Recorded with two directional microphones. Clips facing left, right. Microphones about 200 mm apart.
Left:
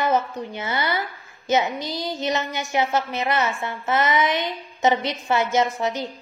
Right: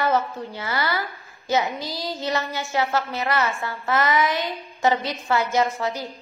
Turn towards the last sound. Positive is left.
turn(degrees=20)  # may be behind; listen again after turning